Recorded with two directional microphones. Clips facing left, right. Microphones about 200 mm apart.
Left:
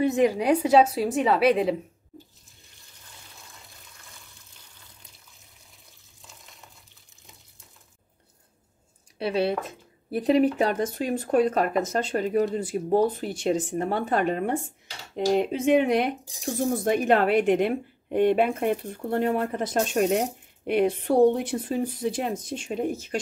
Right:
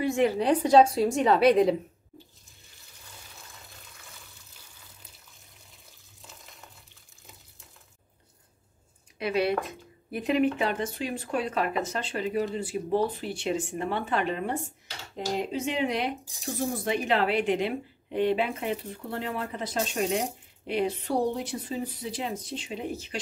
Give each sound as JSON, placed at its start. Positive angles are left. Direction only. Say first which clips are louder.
{"t": 0.0, "sound": "a woman's voice", "louder": "left 3 dB", "side_deg": 20}
{"t": 9.2, "sound": "a woman's voice", "louder": "left 1 dB", "side_deg": 30}